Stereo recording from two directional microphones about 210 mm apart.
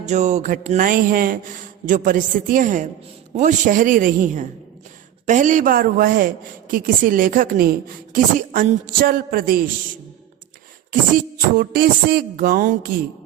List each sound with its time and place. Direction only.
0.0 s a woman's voice: 35° right (ahead or behind)
11.1 s speech: 45° right (ahead or behind)